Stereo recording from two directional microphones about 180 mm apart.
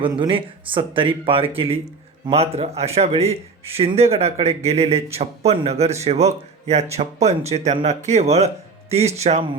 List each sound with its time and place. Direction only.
0.0 s speech: 30° right (ahead or behind)